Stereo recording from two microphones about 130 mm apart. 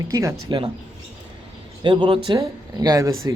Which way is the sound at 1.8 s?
35° right (ahead or behind).